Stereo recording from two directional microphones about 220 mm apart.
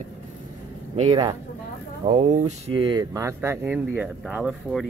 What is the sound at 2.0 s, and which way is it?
Speech, 35° right (ahead or behind).